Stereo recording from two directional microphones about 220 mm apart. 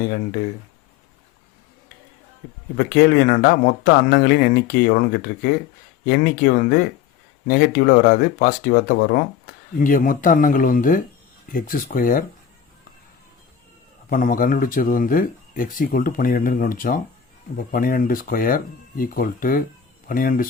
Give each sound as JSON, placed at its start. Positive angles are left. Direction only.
{"t": 2.7, "sound": "speech", "side_deg": 45}
{"t": 14.1, "sound": "speech", "side_deg": 40}